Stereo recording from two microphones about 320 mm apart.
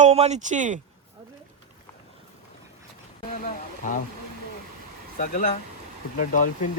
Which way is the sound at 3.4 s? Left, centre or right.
Left.